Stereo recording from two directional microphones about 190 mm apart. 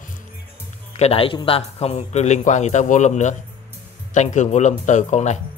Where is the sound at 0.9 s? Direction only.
30° left (ahead or behind).